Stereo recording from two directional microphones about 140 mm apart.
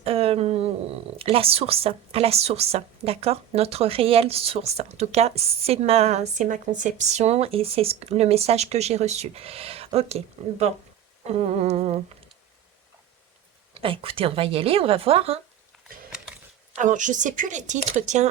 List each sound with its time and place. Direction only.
0.0 s speech: 45° right (ahead or behind)
13.7 s speech: 40° right (ahead or behind)
16.8 s speech: 65° right (ahead or behind)